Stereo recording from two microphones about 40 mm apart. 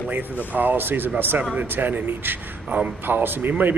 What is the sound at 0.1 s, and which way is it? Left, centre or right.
A man's voice, right.